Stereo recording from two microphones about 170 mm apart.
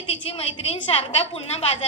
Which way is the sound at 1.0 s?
35° left (ahead or behind).